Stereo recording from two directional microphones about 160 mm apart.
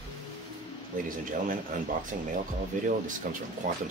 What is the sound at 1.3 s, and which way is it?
Speech, 55° right (ahead or behind).